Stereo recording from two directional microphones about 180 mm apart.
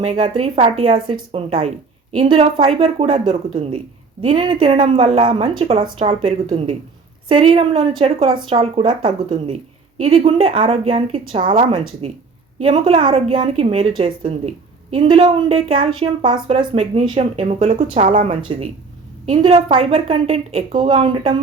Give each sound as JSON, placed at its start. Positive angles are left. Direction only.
{"t": 0.0, "sound": "a woman's voice", "side_deg": -35}